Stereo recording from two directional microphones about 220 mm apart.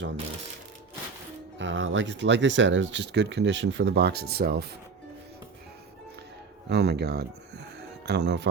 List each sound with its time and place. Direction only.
1.5 s speech: 60° right (ahead or behind)
6.7 s speech: 50° right (ahead or behind)